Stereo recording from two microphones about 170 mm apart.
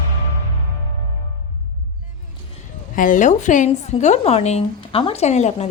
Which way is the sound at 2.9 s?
50° left (ahead or behind).